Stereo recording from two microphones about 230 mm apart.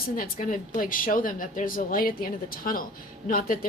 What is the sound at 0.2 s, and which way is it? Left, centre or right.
A woman's voice, left.